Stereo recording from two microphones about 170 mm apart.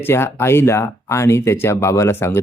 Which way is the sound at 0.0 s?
15° left (ahead or behind).